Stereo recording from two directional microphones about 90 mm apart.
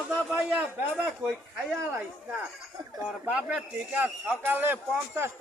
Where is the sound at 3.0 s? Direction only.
15° right (ahead or behind).